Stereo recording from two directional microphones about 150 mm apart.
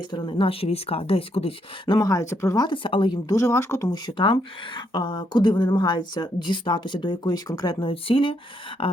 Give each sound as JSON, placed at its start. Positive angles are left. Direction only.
{"t": 0.1, "sound": "a woman's voice", "side_deg": 35}
{"t": 1.9, "sound": "a woman's voice", "side_deg": 25}